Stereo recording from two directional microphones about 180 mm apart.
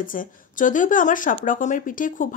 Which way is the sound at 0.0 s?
50° left (ahead or behind).